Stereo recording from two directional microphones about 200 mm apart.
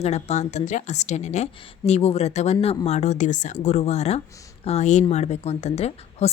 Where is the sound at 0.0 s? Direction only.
35° left (ahead or behind).